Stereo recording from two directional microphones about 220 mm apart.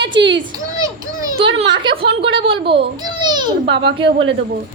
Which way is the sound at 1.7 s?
20° right (ahead or behind).